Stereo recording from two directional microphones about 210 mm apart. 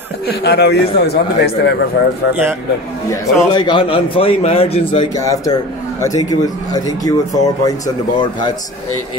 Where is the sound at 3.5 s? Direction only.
20° left (ahead or behind).